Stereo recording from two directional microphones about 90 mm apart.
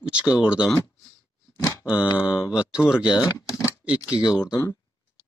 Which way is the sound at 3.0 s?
45° left (ahead or behind).